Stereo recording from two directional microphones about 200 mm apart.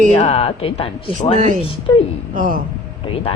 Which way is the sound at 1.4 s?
35° right (ahead or behind).